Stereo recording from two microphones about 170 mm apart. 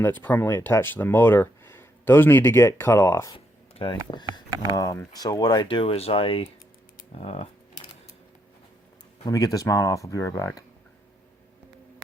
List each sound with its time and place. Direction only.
0.0 s speech: 10° left (ahead or behind)
3.3 s a sound: 30° left (ahead or behind)
4.1 s speech: 25° left (ahead or behind)
9.3 s speech: 20° left (ahead or behind)